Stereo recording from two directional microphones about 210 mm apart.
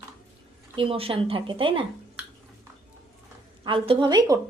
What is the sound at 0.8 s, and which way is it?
Speech, 25° right (ahead or behind).